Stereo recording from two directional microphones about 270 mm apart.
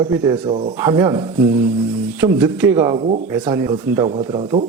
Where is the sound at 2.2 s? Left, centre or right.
Centre.